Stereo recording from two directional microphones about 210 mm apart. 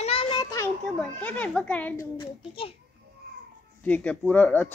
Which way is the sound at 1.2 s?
5° left (ahead or behind).